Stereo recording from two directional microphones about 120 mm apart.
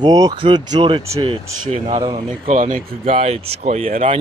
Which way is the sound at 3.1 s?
60° right (ahead or behind).